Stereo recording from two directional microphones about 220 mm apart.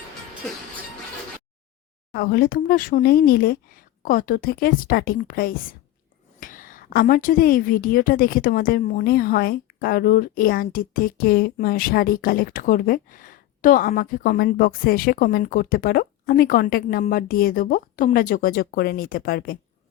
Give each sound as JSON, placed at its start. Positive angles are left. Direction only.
{"t": 2.1, "sound": "a woman's voice", "side_deg": 45}